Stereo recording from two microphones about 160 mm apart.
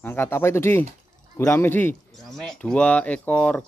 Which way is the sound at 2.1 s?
Centre (ahead or behind).